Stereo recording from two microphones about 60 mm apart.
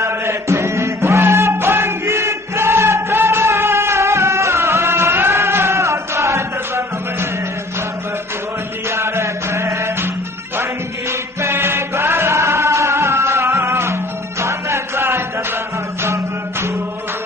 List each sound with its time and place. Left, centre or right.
0.0 s chant: right
8.9 s chant: right
10.6 s music: right